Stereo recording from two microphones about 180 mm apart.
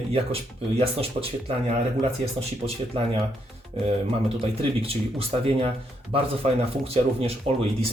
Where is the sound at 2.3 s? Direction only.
30° right (ahead or behind).